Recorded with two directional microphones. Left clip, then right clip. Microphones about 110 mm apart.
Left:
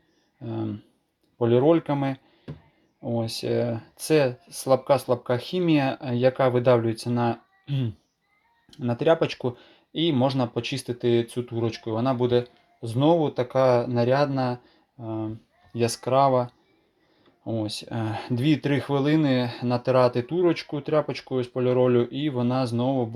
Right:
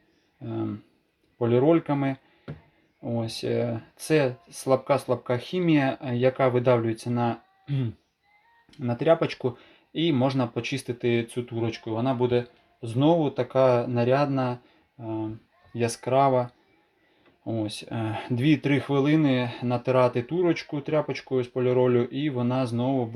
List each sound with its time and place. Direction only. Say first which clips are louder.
0.4 s a sound: even; 30° left (ahead or behind)
1.4 s speech: left 2 dB; 30° left (ahead or behind)
12.8 s speech: left 1 dB; 30° left (ahead or behind)
15.0 s speech: even; 40° left (ahead or behind)